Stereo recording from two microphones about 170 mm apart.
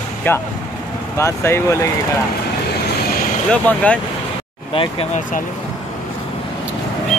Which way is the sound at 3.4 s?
5° left (ahead or behind).